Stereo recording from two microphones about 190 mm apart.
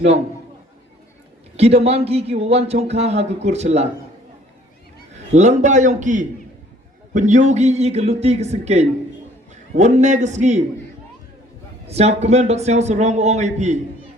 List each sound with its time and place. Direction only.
1.5 s speech: 35° right (ahead or behind)
5.1 s speech: 35° right (ahead or behind)
11.9 s speech: 35° right (ahead or behind)